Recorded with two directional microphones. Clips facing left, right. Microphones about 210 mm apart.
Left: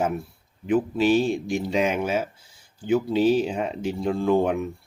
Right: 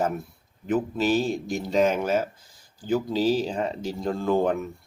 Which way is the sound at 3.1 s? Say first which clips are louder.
Left 3 dB; 35° right (ahead or behind).